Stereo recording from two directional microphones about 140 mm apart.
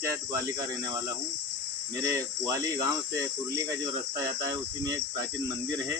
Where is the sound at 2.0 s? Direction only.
25° right (ahead or behind).